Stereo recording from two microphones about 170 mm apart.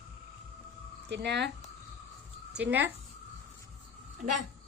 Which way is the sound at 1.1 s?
90° right.